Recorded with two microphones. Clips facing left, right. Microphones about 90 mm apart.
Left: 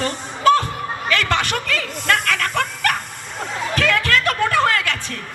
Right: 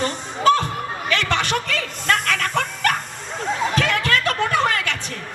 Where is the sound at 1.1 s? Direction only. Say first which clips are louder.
Even; 25° right (ahead or behind).